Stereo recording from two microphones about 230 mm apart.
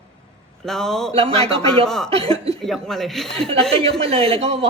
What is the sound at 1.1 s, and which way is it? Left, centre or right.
Speech, right.